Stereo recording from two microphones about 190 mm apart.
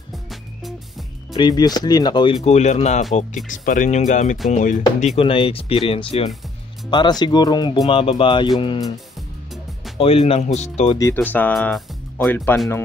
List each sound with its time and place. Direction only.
0.1 s music: centre (ahead or behind)
1.3 s speech: 20° left (ahead or behind)
2.4 s speech: 35° left (ahead or behind)
9.9 s speech: 30° left (ahead or behind)
11.0 s speech: 15° left (ahead or behind)